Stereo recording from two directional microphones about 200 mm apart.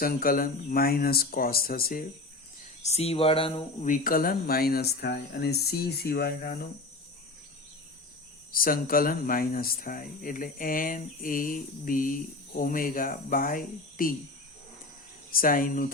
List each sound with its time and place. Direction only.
0.0 s speech: 45° left (ahead or behind)
2.8 s speech: 30° left (ahead or behind)
3.8 s speech: 40° left (ahead or behind)
8.5 s speech: 45° left (ahead or behind)
15.3 s speech: 45° left (ahead or behind)